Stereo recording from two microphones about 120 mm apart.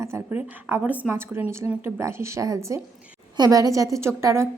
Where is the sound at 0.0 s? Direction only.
20° right (ahead or behind).